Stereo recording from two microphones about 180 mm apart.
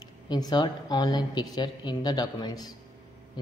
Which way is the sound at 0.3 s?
25° left (ahead or behind).